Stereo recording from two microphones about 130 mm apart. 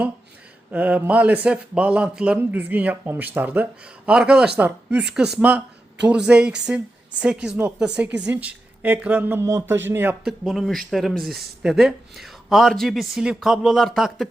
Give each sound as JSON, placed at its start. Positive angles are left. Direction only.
{"t": 0.7, "sound": "a man's voice", "side_deg": -10}
{"t": 10.2, "sound": "speech", "side_deg": 0}